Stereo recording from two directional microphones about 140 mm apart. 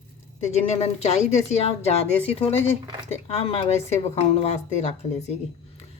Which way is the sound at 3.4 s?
50° left (ahead or behind).